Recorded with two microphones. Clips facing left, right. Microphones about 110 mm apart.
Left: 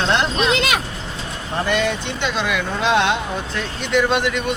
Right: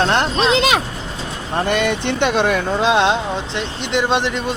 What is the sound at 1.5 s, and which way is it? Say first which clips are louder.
Speech: right 2 dB; 55° right (ahead or behind).